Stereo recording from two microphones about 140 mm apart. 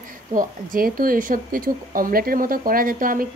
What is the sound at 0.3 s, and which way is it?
Speech, 90° right.